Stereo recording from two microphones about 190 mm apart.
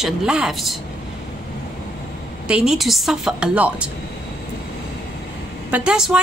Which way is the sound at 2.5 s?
5° right (ahead or behind).